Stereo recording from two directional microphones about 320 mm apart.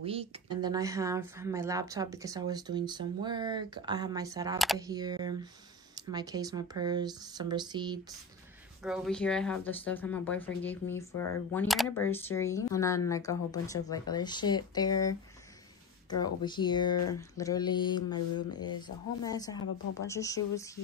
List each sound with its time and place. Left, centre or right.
0.0 s speech: centre
8.8 s speech: centre
19.6 s speech: left
20.1 s speech: centre